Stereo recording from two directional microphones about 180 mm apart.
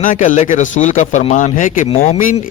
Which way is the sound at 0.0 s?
45° left (ahead or behind).